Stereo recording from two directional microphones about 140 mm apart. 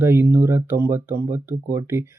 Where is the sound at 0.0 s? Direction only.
15° right (ahead or behind).